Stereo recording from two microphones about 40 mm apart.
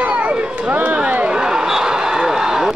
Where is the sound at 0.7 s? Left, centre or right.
Right.